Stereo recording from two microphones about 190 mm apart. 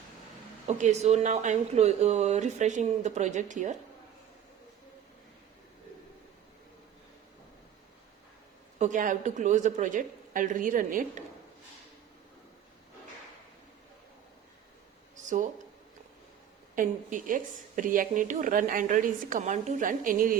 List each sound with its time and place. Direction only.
0.7 s speech: 35° right (ahead or behind)
8.8 s speech: 45° right (ahead or behind)
15.1 s a sound: 40° right (ahead or behind)
16.7 s speech: 45° right (ahead or behind)